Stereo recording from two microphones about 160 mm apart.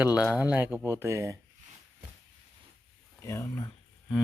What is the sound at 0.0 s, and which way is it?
A man's voice, 10° right (ahead or behind).